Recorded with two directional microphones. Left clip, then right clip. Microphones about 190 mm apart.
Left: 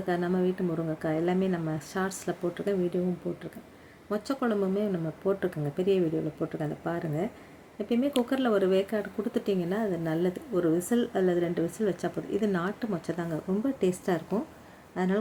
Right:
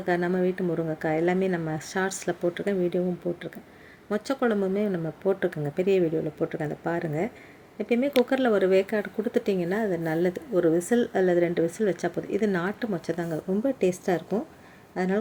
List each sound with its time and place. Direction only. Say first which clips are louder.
0.0 s speech: right 3 dB; 15° right (ahead or behind)